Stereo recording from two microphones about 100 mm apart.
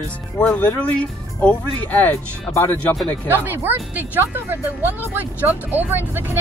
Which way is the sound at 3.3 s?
20° right (ahead or behind).